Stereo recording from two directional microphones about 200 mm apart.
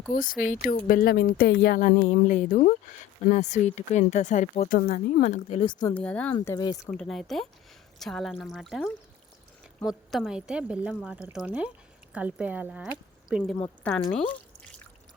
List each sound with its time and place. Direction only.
0.1 s a woman's voice: 40° left (ahead or behind)
5.2 s speech: 35° left (ahead or behind)
5.9 s speech: 5° left (ahead or behind)
6.9 s speech: centre (ahead or behind)
13.8 s speech: 5° left (ahead or behind)